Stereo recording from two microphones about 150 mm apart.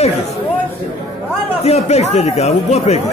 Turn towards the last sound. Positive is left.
turn(degrees=45)  # may be behind; listen again after turning